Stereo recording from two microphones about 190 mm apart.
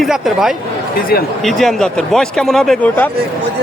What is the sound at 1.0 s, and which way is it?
Speech, 50° left (ahead or behind).